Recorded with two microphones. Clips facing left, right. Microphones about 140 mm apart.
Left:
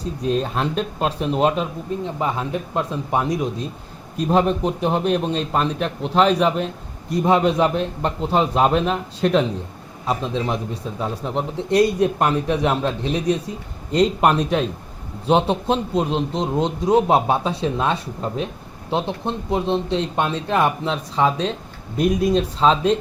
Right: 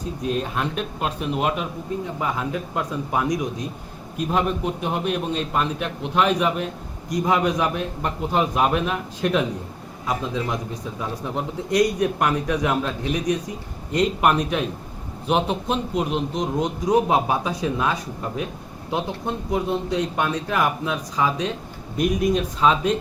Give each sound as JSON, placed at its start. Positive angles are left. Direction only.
{"t": 0.0, "sound": "a man's voice", "side_deg": 35}